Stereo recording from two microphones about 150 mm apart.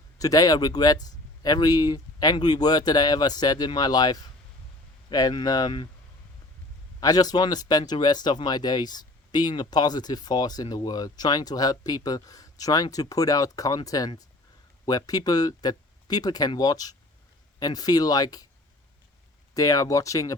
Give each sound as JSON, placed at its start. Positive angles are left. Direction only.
{"t": 0.2, "sound": "speech", "side_deg": 25}
{"t": 7.0, "sound": "speech", "side_deg": 25}
{"t": 19.5, "sound": "speech", "side_deg": 25}